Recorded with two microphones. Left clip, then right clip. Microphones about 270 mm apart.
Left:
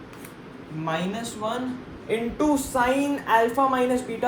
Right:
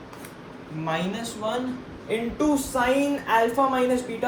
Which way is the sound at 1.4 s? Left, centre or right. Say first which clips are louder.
Right 2 dB; left.